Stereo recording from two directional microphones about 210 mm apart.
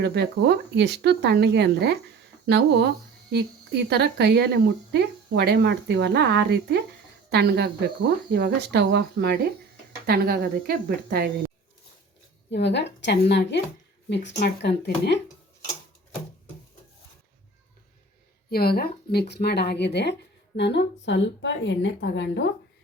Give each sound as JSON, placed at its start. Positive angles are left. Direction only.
{"t": 0.0, "sound": "speech", "side_deg": -55}
{"t": 12.5, "sound": "a woman's voice", "side_deg": 55}
{"t": 18.5, "sound": "a woman's voice", "side_deg": 45}